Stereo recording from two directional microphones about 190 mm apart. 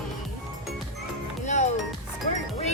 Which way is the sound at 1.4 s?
40° left (ahead or behind).